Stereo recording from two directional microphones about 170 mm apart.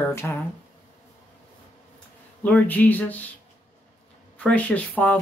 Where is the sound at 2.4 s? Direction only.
10° left (ahead or behind).